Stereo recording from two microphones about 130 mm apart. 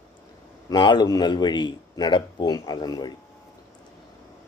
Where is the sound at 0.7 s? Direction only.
35° left (ahead or behind).